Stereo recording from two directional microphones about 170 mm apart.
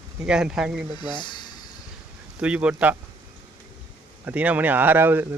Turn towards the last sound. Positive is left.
turn(degrees=-10)  # may be behind; listen again after turning